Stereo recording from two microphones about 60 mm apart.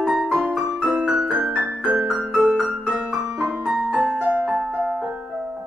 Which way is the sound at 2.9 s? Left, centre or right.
Right.